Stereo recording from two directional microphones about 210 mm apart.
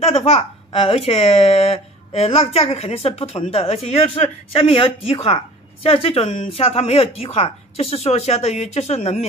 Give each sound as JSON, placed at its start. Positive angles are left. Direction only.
{"t": 0.0, "sound": "a woman's voice", "side_deg": 30}